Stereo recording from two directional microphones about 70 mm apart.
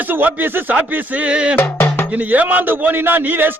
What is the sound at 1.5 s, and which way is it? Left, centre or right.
Music, left.